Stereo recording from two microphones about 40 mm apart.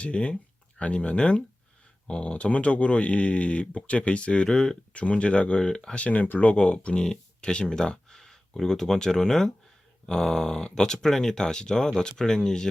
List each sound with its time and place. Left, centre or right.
0.0 s speech: left
4.4 s speech: centre
4.9 s speech: left
6.0 s speech: left
6.6 s speech: left